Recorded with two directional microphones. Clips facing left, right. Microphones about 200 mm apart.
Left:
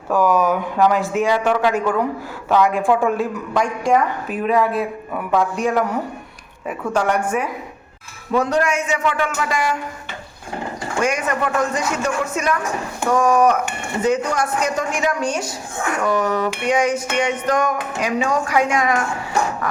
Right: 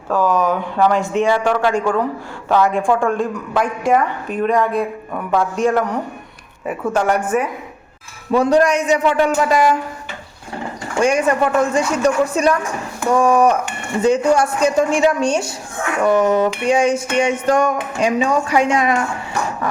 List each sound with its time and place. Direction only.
0.1 s a woman's voice: 10° left (ahead or behind); by 7.2 s 5° right (ahead or behind)
8.3 s speech: 30° right (ahead or behind)
11.0 s speech: 30° right (ahead or behind)
13.1 s music: 30° right (ahead or behind)